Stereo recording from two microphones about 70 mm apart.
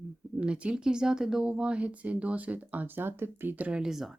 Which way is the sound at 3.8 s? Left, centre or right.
Centre.